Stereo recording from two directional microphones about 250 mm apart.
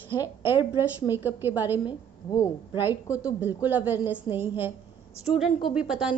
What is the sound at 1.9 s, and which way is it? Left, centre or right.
Speech, centre.